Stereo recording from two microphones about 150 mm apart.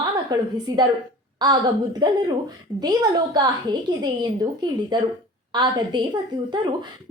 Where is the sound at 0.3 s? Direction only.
25° right (ahead or behind).